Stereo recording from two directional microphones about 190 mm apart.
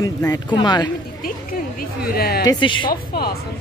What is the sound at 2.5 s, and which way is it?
Speech, 25° left (ahead or behind).